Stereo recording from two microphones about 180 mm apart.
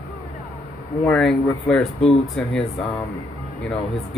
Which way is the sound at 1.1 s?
5° left (ahead or behind).